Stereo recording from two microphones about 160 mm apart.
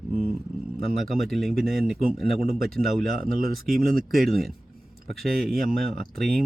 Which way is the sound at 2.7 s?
Centre (ahead or behind).